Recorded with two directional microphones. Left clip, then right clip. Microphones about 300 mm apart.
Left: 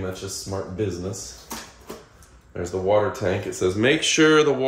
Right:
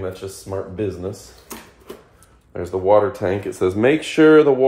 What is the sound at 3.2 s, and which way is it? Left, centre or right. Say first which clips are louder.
Speech: right 3 dB; centre.